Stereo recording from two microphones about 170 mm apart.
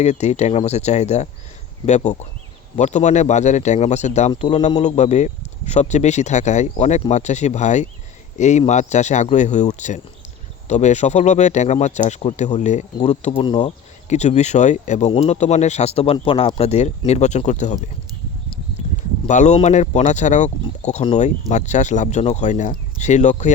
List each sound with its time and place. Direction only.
0.0 s speech: 40° left (ahead or behind)
19.3 s speech: 45° left (ahead or behind)